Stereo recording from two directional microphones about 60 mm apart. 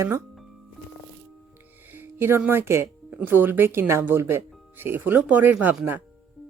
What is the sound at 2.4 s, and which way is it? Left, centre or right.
Speech, right.